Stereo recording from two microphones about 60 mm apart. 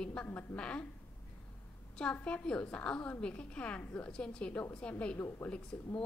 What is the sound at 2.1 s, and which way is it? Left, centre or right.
A woman's voice, centre.